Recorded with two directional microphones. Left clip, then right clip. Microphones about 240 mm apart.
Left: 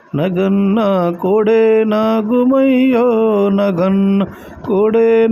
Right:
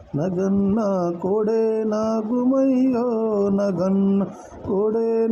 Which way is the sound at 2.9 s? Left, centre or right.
Left.